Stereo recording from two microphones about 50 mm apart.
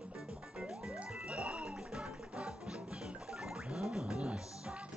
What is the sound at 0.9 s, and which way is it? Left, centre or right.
Music, right.